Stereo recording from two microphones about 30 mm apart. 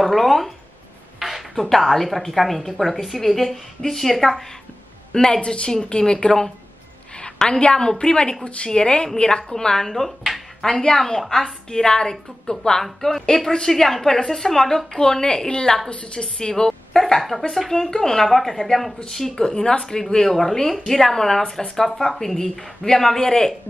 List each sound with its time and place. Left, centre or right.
0.0 s a sound: centre
1.6 s a woman's voice: centre
5.1 s a woman's voice: left
5.4 s speech: left
6.2 s a woman's voice: centre
11.7 s a woman's voice: left
13.7 s a woman's voice: centre
15.0 s a woman's voice: left
15.9 s a woman's voice: left
17.0 s a woman's voice: centre
17.7 s a woman's voice: centre
18.2 s a woman's voice: centre
19.3 s a woman's voice: left